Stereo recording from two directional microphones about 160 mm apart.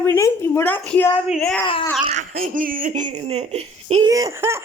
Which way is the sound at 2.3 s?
55° right (ahead or behind).